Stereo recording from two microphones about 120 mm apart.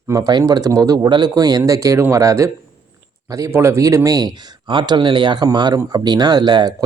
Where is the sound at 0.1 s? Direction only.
35° right (ahead or behind).